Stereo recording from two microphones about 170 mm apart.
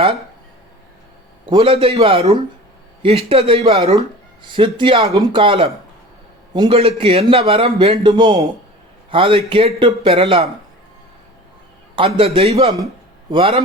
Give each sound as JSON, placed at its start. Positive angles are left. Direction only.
{"t": 1.5, "sound": "a man's voice", "side_deg": -30}
{"t": 11.9, "sound": "a man's voice", "side_deg": -30}